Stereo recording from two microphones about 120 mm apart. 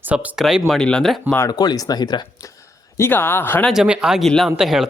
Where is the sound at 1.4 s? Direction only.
35° left (ahead or behind).